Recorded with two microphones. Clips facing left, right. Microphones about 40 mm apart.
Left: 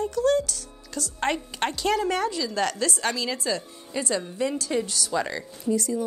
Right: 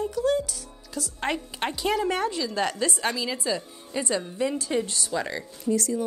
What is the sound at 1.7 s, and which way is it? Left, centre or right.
A woman's voice, centre.